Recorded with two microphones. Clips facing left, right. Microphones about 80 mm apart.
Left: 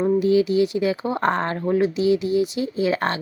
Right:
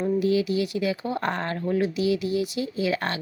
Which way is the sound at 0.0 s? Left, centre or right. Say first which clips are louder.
Left 5 dB; left.